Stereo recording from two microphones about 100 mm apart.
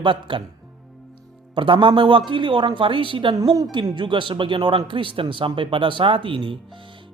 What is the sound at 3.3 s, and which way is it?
Speech, 40° right (ahead or behind).